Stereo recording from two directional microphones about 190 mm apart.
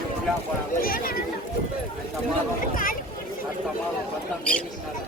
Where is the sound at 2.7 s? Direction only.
45° left (ahead or behind).